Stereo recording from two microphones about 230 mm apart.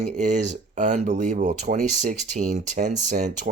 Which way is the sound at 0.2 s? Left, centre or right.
Right.